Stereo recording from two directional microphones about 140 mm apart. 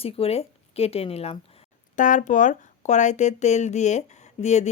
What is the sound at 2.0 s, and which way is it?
Speech, 65° left (ahead or behind).